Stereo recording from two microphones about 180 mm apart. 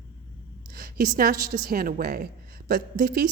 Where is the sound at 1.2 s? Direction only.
55° right (ahead or behind).